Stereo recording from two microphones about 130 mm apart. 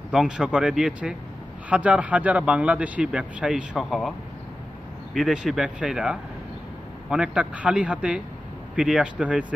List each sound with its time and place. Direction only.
0.1 s speech: 5° right (ahead or behind)
5.1 s speech: 5° right (ahead or behind)